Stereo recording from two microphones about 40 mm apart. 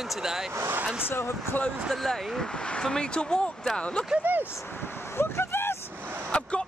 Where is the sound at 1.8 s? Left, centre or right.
Centre.